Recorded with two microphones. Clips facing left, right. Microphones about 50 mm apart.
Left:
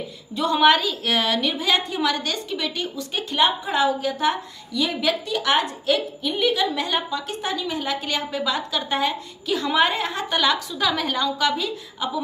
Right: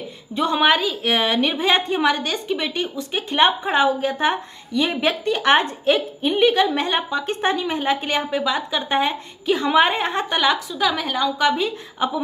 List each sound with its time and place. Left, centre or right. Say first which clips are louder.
0.3 s a woman's voice: even; right
3.3 s a woman's voice: right 3 dB; right; by 8.8 s centre
8.8 s a woman's voice: right 3 dB; right
10.4 s a woman's voice: right 1 dB; centre
11.3 s a woman's voice: right 3 dB; right